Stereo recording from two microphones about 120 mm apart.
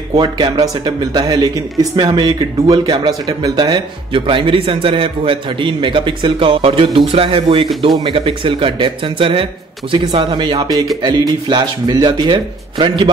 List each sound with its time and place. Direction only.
0.1 s speech: 35° right (ahead or behind)